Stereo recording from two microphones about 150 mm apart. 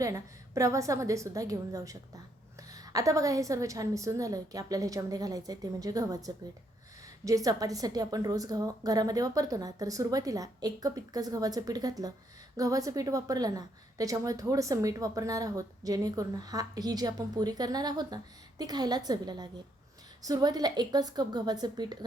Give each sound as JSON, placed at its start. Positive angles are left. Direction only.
{"t": 0.0, "sound": "a woman's voice", "side_deg": -20}